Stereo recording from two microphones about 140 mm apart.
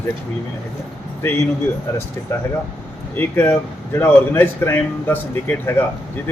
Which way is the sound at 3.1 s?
15° left (ahead or behind).